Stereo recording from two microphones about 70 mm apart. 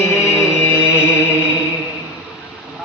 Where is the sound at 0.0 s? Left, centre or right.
Left.